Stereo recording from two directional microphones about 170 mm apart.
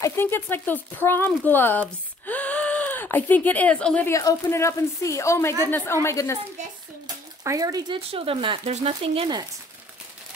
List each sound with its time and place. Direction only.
0.0 s speech: 15° left (ahead or behind)
4.1 s a woman's voice: 20° left (ahead or behind)
7.4 s speech: 20° right (ahead or behind)